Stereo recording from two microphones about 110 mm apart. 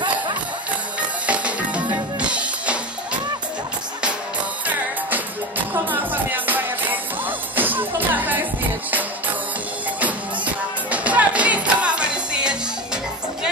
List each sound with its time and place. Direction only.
1.2 s music: 10° right (ahead or behind)
5.7 s music: 15° right (ahead or behind)
9.9 s music: 15° right (ahead or behind)